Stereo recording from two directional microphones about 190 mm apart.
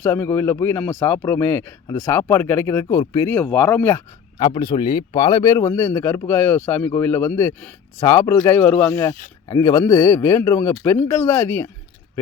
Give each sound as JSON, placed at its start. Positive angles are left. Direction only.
{"t": 0.0, "sound": "speech", "side_deg": 10}
{"t": 4.4, "sound": "speech", "side_deg": 25}